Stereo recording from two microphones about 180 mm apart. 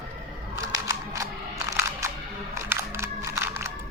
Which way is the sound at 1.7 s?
15° right (ahead or behind).